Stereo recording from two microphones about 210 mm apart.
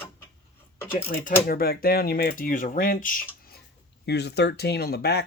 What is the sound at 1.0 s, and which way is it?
Speech, 40° left (ahead or behind).